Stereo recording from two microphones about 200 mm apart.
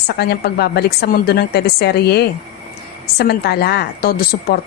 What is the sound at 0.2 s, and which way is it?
Speech, 55° left (ahead or behind).